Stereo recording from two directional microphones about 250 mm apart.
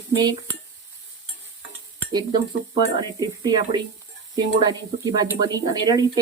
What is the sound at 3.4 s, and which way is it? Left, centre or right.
Speech, centre.